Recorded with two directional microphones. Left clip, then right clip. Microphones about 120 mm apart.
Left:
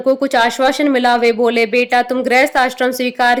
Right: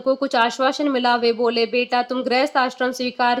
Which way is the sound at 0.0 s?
40° left (ahead or behind).